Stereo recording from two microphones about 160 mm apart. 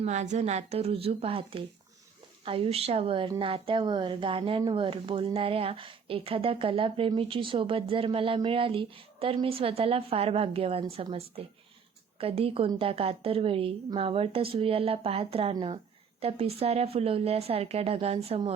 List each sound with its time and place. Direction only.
0.0 s speech: 45° right (ahead or behind)